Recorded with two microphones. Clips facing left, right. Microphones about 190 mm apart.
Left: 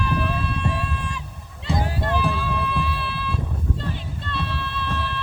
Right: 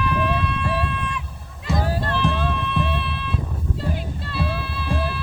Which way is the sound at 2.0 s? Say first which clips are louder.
Left 1 dB; 15° left (ahead or behind).